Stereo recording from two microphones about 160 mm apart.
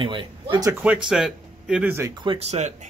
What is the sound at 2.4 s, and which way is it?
Speech, 45° right (ahead or behind).